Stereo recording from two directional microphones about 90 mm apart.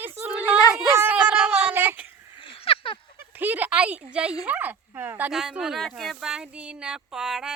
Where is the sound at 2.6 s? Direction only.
90° left.